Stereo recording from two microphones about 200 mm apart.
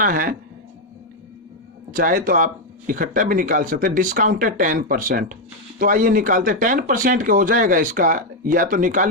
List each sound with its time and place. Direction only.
0.0 s speech: 45° right (ahead or behind)
1.9 s speech: 45° right (ahead or behind)